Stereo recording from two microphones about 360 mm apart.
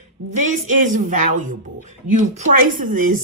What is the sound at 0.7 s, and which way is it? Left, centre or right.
Speech, right.